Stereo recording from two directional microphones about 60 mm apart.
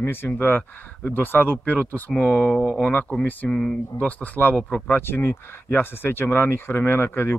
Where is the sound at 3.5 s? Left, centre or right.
Centre.